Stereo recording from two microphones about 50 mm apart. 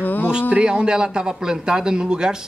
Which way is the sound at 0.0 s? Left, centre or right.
Left.